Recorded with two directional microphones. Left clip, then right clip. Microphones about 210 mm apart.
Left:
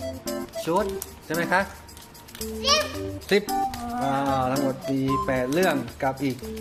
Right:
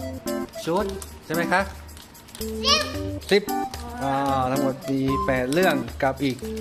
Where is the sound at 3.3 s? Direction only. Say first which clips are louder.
Right 1 dB; centre (ahead or behind).